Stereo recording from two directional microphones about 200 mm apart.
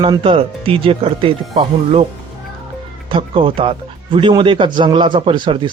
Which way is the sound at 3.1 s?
25° right (ahead or behind).